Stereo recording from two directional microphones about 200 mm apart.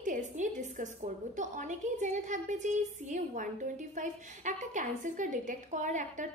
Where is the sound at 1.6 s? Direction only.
40° right (ahead or behind).